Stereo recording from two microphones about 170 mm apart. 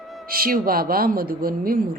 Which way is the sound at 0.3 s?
60° right (ahead or behind).